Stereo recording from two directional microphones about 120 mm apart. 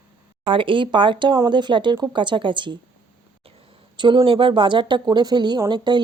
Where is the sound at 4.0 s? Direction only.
45° right (ahead or behind).